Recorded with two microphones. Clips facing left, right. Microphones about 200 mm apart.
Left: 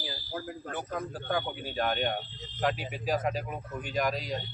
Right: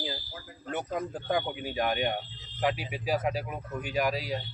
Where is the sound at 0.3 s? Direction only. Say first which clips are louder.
Left 9 dB; 55° left (ahead or behind).